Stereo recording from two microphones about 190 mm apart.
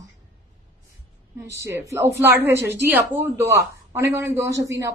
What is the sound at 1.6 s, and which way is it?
A woman's voice, 15° right (ahead or behind).